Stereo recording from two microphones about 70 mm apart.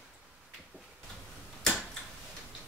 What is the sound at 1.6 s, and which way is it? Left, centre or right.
Tick-tock, centre.